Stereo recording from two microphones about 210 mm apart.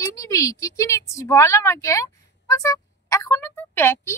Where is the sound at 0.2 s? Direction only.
15° left (ahead or behind).